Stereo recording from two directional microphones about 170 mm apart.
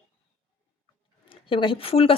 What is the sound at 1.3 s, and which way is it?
Speech, 30° left (ahead or behind).